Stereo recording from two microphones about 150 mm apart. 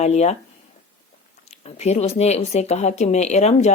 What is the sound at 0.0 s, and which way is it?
Speech, 50° left (ahead or behind).